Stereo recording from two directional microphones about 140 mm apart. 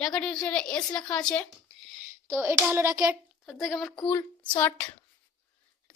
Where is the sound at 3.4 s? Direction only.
Centre (ahead or behind).